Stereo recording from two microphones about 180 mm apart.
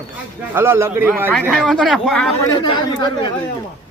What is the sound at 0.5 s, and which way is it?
Speech, 15° right (ahead or behind).